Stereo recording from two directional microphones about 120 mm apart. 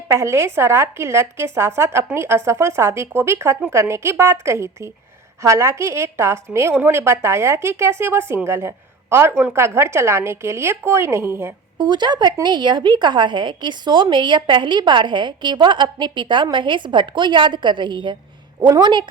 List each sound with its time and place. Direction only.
0.1 s a woman's voice: 25° right (ahead or behind)
11.8 s speech: 40° right (ahead or behind)